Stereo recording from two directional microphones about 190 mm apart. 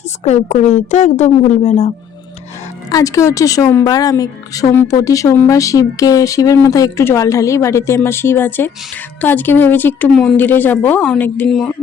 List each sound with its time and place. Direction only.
0.3 s speech: 35° left (ahead or behind)
2.9 s a woman's voice: 15° left (ahead or behind)